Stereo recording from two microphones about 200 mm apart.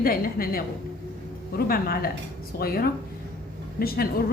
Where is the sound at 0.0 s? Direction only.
45° left (ahead or behind).